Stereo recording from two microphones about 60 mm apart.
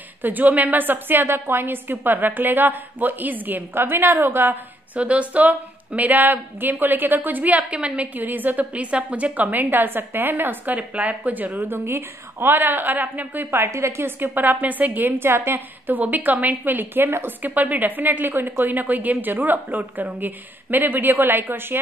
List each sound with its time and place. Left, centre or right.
0.2 s a woman's voice: right
4.9 s a woman's voice: right
13.7 s a woman's voice: right
16.0 s a woman's voice: right